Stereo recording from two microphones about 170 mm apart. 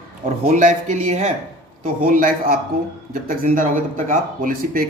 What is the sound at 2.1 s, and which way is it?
Speech, 55° right (ahead or behind).